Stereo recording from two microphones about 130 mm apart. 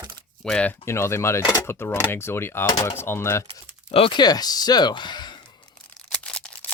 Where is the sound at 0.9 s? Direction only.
20° left (ahead or behind).